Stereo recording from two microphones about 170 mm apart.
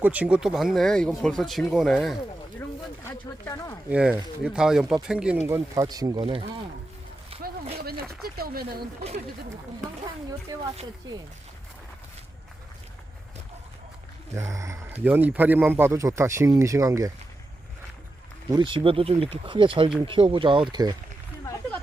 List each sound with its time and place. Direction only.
0.0 s speech: 10° right (ahead or behind)
3.1 s speech: 15° left (ahead or behind)
3.8 s speech: 10° right (ahead or behind)
5.5 s speech: 20° right (ahead or behind)
7.8 s a sound: 65° right (ahead or behind)
8.2 s speech: 65° right (ahead or behind)
14.3 s speech: 15° right (ahead or behind)
18.5 s speech: 30° right (ahead or behind)